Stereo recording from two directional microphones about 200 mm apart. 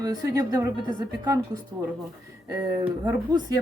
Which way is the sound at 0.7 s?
20° left (ahead or behind).